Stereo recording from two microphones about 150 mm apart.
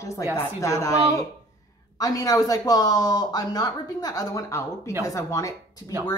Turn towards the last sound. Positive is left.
turn(degrees=25)  # may be behind; listen again after turning